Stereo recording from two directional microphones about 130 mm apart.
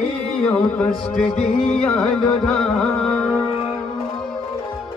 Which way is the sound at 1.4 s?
50° left (ahead or behind).